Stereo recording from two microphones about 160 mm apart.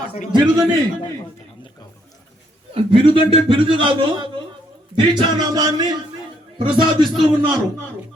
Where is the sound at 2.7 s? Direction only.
35° right (ahead or behind).